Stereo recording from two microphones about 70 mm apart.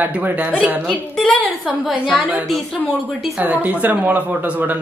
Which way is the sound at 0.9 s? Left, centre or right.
Centre.